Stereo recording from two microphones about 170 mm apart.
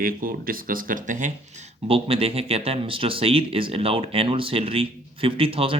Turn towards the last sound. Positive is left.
turn(degrees=-35)  # may be behind; listen again after turning